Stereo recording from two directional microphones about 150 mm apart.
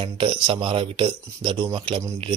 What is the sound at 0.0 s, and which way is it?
A man's voice, 35° right (ahead or behind).